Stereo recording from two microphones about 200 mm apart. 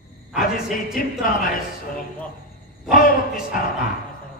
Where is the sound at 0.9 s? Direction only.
45° left (ahead or behind).